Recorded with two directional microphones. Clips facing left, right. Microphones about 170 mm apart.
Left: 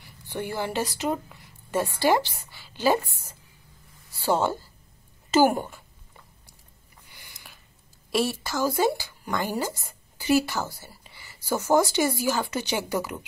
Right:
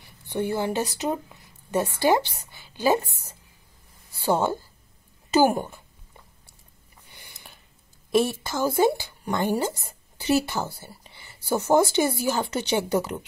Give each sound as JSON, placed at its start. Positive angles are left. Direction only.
{"t": 0.3, "sound": "a woman's voice", "side_deg": -20}
{"t": 7.1, "sound": "a sound", "side_deg": -25}
{"t": 8.1, "sound": "speech", "side_deg": -20}
{"t": 12.9, "sound": "speech", "side_deg": -30}